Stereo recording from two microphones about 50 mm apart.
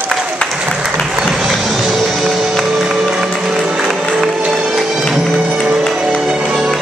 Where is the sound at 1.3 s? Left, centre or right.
Centre.